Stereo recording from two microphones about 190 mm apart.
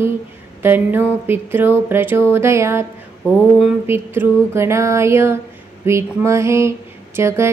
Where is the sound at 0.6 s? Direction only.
10° right (ahead or behind).